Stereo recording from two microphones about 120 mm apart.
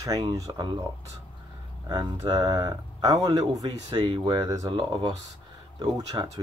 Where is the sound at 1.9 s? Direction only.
30° right (ahead or behind).